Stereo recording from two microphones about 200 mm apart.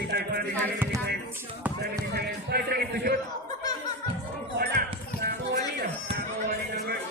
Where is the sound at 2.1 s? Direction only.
50° right (ahead or behind).